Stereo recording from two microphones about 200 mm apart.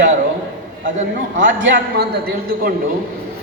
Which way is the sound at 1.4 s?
65° right (ahead or behind).